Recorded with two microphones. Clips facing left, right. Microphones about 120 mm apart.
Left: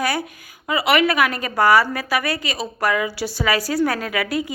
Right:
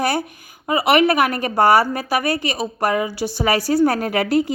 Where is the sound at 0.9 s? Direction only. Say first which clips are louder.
Right 2 dB; 50° right (ahead or behind).